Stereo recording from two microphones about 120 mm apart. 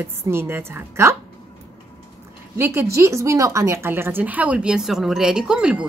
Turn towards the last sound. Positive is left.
turn(degrees=-5)  # may be behind; listen again after turning